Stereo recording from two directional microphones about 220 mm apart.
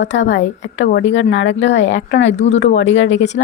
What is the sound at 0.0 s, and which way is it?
Speech, 55° left (ahead or behind).